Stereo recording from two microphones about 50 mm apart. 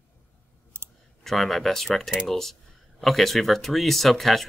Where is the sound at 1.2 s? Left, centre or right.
Centre.